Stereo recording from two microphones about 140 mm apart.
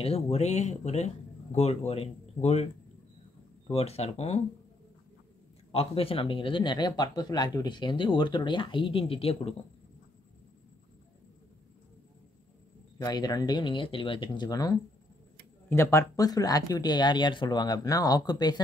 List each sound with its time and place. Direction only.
0.0 s speech: 45° left (ahead or behind)
5.7 s speech: 45° left (ahead or behind)
13.0 s speech: 25° left (ahead or behind)